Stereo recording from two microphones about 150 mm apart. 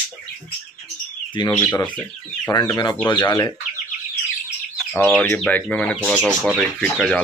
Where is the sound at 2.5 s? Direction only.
25° left (ahead or behind).